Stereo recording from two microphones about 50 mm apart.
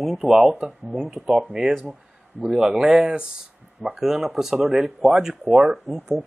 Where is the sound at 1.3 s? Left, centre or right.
Centre.